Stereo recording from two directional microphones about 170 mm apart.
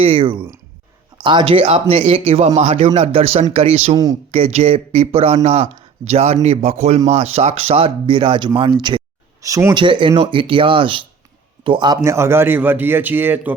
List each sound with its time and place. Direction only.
0.0 s speech: 30° right (ahead or behind)
3.9 s speech: 20° right (ahead or behind)
4.3 s speech: 35° right (ahead or behind); by 9.8 s 20° right (ahead or behind)
9.8 s speech: 30° right (ahead or behind)
12.0 s speech: 15° right (ahead or behind)